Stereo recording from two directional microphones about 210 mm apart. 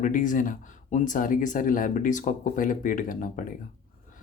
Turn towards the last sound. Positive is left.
turn(degrees=40)  # may be behind; listen again after turning